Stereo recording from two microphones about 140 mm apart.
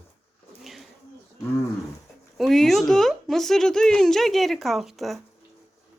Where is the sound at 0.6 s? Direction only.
Centre (ahead or behind).